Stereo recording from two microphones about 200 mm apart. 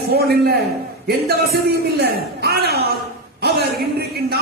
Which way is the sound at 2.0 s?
55° right (ahead or behind).